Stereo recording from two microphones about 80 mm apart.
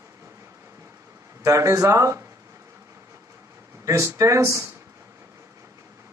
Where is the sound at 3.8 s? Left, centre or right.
Right.